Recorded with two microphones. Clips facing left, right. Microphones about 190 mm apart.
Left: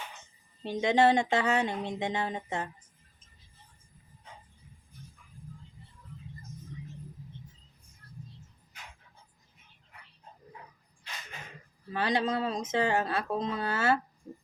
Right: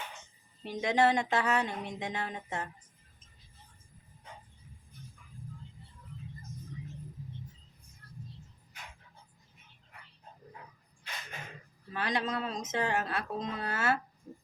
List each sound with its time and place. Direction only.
0.6 s speech: 25° left (ahead or behind)
11.9 s speech: 30° left (ahead or behind)